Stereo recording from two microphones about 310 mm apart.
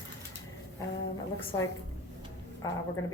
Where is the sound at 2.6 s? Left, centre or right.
Centre.